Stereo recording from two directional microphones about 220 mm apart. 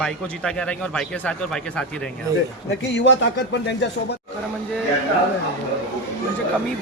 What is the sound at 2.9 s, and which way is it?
Speech, 50° left (ahead or behind).